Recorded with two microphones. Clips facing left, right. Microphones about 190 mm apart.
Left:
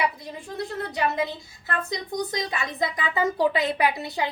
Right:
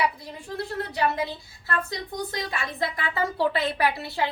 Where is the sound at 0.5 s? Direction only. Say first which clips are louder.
Even; 20° left (ahead or behind).